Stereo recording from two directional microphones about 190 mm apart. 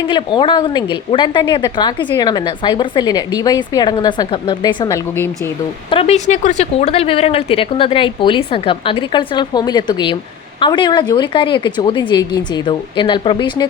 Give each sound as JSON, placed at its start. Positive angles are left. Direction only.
{"t": 0.1, "sound": "a woman's voice", "side_deg": 25}
{"t": 5.9, "sound": "a woman's voice", "side_deg": 30}